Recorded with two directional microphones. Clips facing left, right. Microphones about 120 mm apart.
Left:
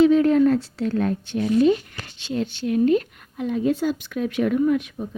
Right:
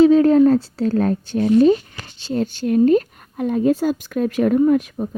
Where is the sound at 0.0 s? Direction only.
35° right (ahead or behind).